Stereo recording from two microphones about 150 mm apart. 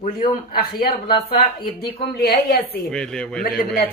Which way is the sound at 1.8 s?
90° left.